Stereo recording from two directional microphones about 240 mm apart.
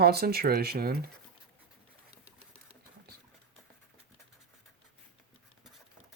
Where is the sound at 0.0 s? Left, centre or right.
Right.